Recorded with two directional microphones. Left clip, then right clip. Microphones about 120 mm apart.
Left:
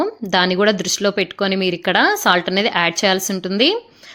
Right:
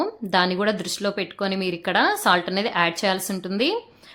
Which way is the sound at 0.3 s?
35° left (ahead or behind).